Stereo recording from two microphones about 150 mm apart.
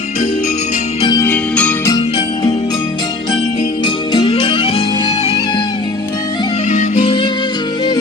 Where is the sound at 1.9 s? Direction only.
30° left (ahead or behind).